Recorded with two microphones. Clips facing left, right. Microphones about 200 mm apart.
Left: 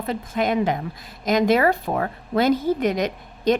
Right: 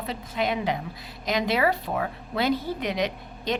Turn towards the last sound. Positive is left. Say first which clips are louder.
# left 8 dB
turn(degrees=45)  # may be behind; listen again after turning